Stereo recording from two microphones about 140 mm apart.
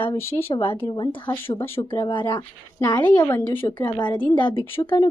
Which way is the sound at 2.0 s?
35° left (ahead or behind).